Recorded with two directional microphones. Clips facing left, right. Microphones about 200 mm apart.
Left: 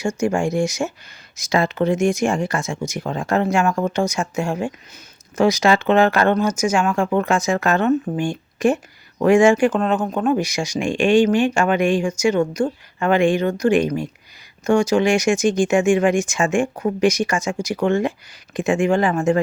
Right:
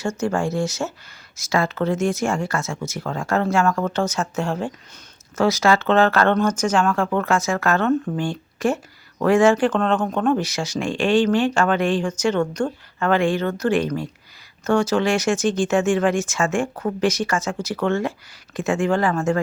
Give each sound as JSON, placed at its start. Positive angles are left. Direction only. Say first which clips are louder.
{"t": 0.2, "sound": "speech", "louder": "left 3 dB", "side_deg": 15}